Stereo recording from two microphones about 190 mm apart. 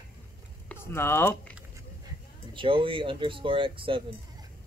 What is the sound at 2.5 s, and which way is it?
Speech, 25° right (ahead or behind).